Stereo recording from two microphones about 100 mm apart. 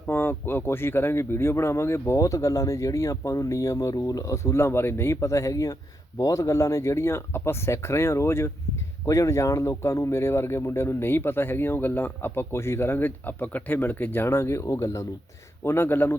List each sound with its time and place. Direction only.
0.1 s speech: 20° left (ahead or behind)